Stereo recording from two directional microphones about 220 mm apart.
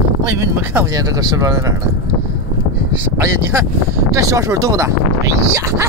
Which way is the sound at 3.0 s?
10° right (ahead or behind).